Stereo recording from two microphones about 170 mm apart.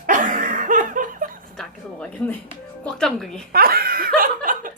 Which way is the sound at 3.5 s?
65° right (ahead or behind).